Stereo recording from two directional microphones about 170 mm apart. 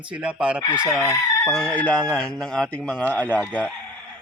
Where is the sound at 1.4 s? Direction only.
5° left (ahead or behind).